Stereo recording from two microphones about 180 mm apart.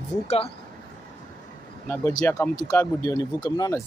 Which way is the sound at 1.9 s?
15° left (ahead or behind).